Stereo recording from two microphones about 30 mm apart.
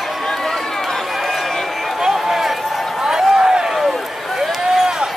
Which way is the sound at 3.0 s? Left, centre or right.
Right.